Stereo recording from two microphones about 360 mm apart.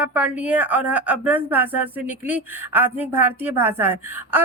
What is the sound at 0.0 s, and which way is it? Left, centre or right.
A woman's voice, centre.